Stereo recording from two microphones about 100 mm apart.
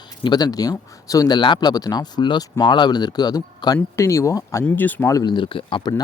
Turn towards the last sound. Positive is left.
turn(degrees=55)  # may be behind; listen again after turning